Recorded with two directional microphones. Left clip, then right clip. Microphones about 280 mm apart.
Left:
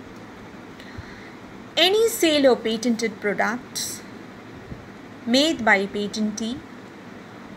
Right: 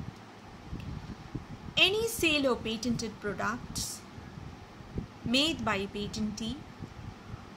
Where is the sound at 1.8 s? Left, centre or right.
Centre.